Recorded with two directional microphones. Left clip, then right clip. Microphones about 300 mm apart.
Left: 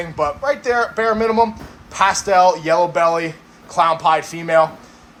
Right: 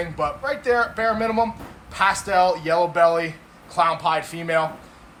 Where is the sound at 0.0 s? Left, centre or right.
Centre.